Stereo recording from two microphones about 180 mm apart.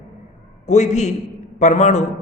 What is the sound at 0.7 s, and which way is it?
A man's voice, 40° left (ahead or behind).